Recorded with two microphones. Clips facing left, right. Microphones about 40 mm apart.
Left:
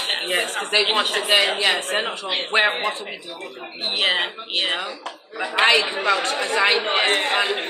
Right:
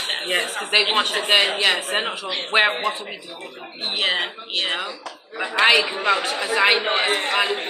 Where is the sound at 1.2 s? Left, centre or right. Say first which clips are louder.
Right 1 dB; centre.